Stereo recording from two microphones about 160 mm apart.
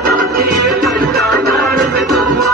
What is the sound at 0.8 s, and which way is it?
Music, centre (ahead or behind).